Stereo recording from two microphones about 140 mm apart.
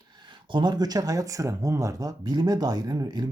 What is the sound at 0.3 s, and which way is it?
A man's voice, 35° right (ahead or behind).